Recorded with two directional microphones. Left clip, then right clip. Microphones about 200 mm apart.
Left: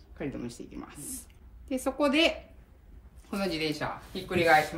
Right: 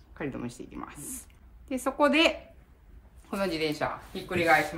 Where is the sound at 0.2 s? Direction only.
15° right (ahead or behind).